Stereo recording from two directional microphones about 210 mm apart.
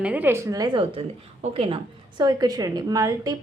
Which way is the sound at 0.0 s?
10° right (ahead or behind).